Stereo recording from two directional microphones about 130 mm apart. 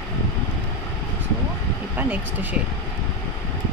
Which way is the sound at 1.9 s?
10° right (ahead or behind).